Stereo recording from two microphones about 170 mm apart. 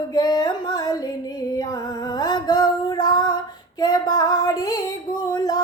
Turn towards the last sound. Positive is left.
turn(degrees=20)  # may be behind; listen again after turning